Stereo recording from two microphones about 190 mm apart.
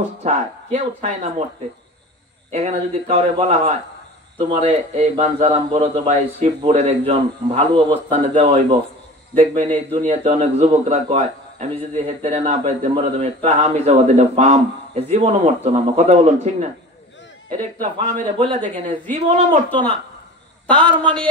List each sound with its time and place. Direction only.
0.2 s a man's voice: 40° right (ahead or behind)
2.5 s a man's voice: 35° right (ahead or behind)
17.9 s a man's voice: 35° right (ahead or behind)
19.7 s a man's voice: 10° left (ahead or behind)